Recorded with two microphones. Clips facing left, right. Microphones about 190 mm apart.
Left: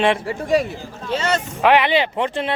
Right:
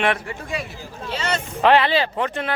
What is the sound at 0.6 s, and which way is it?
Speech, 40° left (ahead or behind).